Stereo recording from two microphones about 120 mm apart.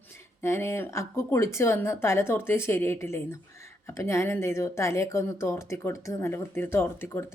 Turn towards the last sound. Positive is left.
turn(degrees=20)  # may be behind; listen again after turning